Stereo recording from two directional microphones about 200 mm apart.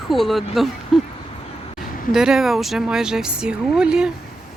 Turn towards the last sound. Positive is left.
turn(degrees=-5)  # may be behind; listen again after turning